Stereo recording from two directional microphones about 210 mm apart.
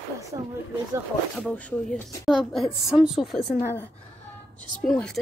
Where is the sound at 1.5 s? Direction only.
5° left (ahead or behind).